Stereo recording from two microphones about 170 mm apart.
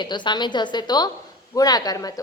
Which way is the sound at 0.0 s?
25° left (ahead or behind).